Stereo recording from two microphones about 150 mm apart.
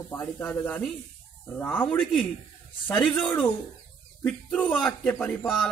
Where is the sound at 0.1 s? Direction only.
15° left (ahead or behind).